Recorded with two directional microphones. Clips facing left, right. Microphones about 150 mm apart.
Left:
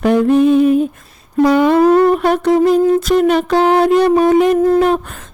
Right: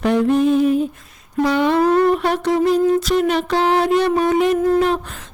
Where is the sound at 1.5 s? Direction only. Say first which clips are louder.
Left 5 dB; 45° left (ahead or behind).